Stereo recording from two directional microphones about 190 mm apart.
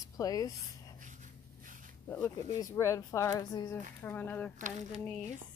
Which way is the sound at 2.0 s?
15° left (ahead or behind).